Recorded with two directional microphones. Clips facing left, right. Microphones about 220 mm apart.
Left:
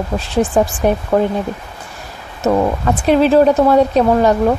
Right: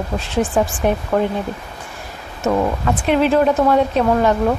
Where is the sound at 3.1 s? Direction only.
35° left (ahead or behind).